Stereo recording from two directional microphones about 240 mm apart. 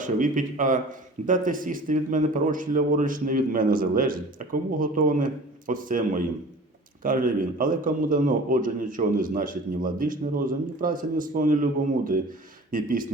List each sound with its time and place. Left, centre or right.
0.0 s a man's voice: right